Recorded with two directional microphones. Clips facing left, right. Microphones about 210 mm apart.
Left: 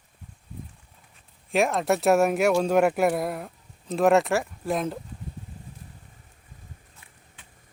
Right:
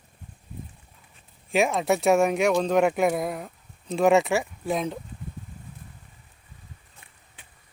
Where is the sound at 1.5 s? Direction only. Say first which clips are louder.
Even; centre (ahead or behind).